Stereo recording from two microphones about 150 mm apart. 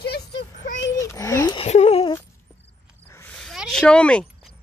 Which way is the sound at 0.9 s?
20° left (ahead or behind).